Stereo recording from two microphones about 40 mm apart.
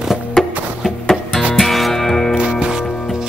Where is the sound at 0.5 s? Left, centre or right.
Right.